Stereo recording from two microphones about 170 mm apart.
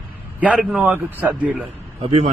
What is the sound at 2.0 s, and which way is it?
Speech, 40° right (ahead or behind).